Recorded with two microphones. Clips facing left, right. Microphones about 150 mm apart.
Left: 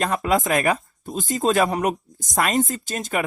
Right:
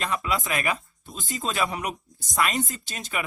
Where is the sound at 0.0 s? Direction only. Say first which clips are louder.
Left 7 dB; 45° left (ahead or behind).